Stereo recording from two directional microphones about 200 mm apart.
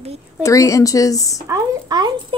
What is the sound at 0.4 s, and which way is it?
Speech, 15° left (ahead or behind).